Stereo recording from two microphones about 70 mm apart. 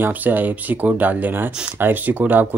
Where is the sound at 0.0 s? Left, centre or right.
Right.